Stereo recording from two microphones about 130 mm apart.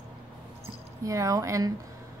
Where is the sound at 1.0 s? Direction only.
25° right (ahead or behind).